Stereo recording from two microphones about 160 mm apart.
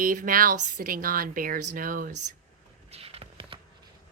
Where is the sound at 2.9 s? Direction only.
40° right (ahead or behind).